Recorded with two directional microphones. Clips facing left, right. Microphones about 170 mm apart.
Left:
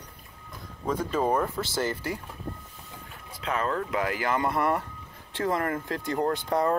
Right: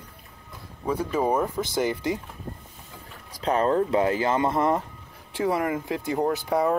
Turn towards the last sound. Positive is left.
turn(degrees=-5)  # may be behind; listen again after turning